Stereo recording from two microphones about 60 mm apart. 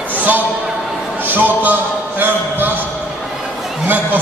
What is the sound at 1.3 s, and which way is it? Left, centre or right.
Speech, right.